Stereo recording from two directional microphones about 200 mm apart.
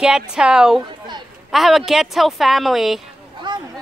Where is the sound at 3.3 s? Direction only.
20° right (ahead or behind).